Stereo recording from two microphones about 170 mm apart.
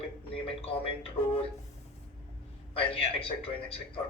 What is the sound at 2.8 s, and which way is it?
Speech, 35° left (ahead or behind).